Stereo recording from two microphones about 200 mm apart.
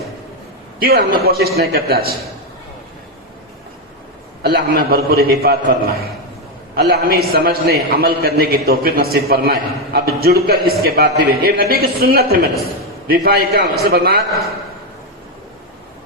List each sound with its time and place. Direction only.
0.8 s a man's voice: 50° right (ahead or behind)
4.4 s a man's voice: 45° right (ahead or behind)